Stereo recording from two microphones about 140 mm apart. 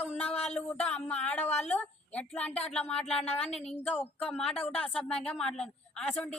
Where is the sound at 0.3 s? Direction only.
50° left (ahead or behind).